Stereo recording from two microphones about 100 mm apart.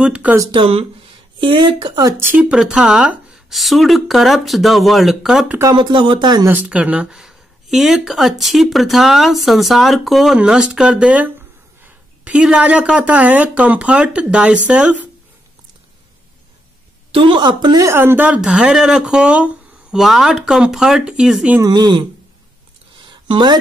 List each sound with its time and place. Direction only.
0.0 s speech: 15° right (ahead or behind)
0.5 s speech: 65° right (ahead or behind)
1.4 s speech: 50° right (ahead or behind)
2.1 s speech: 25° right (ahead or behind)
2.4 s speech: 10° right (ahead or behind)
3.5 s speech: centre (ahead or behind)
5.8 s speech: 55° right (ahead or behind)
6.4 s speech: 15° right (ahead or behind)
17.1 s speech: 55° right (ahead or behind)
17.7 s speech: 25° right (ahead or behind); by 21.5 s 5° right (ahead or behind)
21.5 s speech: 40° right (ahead or behind)
23.0 s a sound: 50° right (ahead or behind)